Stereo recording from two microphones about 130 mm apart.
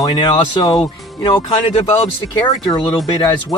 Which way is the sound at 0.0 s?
35° left (ahead or behind).